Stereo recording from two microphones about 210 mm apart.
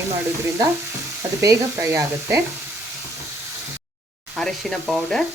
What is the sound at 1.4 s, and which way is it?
Sizzle, 15° right (ahead or behind).